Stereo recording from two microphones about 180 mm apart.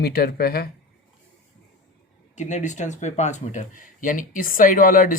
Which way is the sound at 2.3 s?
40° left (ahead or behind).